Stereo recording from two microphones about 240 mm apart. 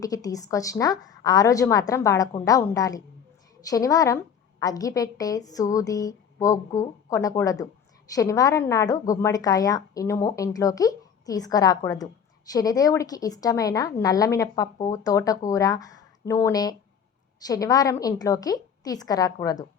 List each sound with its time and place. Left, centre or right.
0.0 s a woman's voice: centre